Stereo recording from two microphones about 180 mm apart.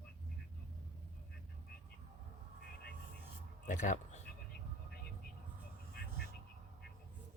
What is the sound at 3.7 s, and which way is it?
Speech, 45° left (ahead or behind).